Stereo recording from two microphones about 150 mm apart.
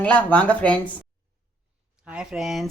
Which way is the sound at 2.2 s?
5° right (ahead or behind).